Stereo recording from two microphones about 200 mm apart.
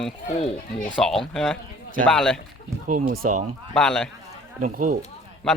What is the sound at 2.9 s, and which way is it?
Speech, 40° right (ahead or behind).